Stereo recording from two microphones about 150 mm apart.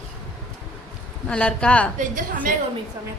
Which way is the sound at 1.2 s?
5° left (ahead or behind).